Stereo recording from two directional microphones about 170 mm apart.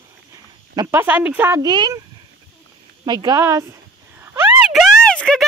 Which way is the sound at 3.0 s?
25° right (ahead or behind).